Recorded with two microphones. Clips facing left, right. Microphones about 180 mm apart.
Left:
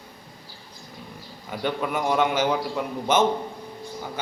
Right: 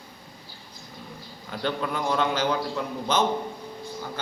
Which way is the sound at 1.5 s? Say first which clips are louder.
Left 2 dB; 10° left (ahead or behind).